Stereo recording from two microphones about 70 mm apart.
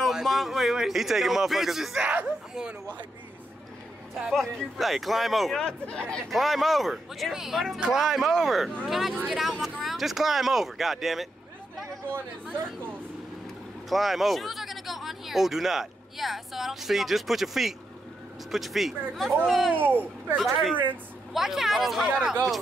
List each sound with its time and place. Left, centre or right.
0.0 s speech: centre
4.1 s speech: centre
6.3 s speech: centre
13.8 s speech: centre
19.7 s speech: right
20.3 s speech: centre